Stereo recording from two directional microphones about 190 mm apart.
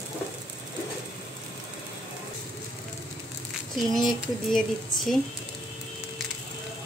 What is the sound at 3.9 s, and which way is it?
Speech, centre (ahead or behind).